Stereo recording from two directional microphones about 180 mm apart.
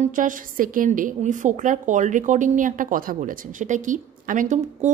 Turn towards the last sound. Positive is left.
turn(degrees=-45)  # may be behind; listen again after turning